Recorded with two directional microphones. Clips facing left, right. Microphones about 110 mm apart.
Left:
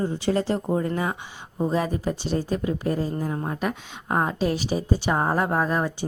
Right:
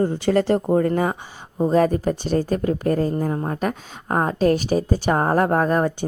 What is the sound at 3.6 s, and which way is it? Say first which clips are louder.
A woman's voice: right 3 dB; 40° right (ahead or behind).